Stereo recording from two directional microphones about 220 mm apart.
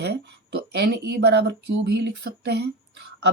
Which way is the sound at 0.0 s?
50° right (ahead or behind).